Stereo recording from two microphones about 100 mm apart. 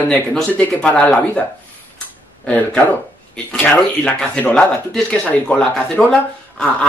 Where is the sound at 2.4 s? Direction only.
10° left (ahead or behind).